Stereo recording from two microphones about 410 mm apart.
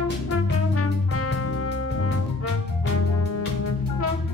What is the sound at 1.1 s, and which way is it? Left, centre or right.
Music, left.